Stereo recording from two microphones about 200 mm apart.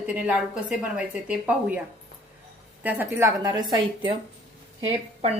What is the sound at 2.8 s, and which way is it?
A woman's voice, 10° right (ahead or behind).